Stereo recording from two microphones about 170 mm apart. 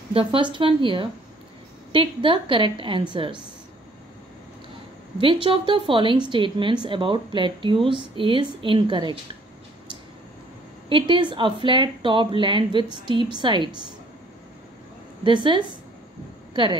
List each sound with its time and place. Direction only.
0.1 s a woman's voice: 30° right (ahead or behind)
5.2 s speech: 30° right (ahead or behind)
10.9 s speech: 30° right (ahead or behind)
15.2 s speech: 30° right (ahead or behind)